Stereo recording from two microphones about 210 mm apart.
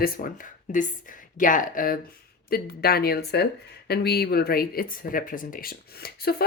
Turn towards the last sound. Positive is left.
turn(degrees=50)  # may be behind; listen again after turning